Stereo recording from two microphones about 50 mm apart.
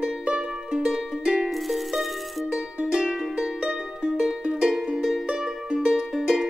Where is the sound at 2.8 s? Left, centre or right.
Centre.